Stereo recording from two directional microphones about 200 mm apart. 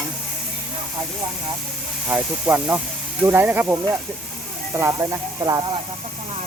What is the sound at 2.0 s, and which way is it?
Speech, 10° right (ahead or behind).